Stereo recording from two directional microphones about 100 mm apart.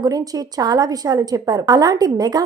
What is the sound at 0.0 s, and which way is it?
A woman's voice, 40° right (ahead or behind).